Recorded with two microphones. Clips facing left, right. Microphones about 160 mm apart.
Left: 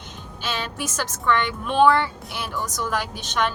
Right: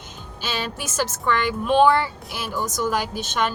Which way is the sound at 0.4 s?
5° right (ahead or behind).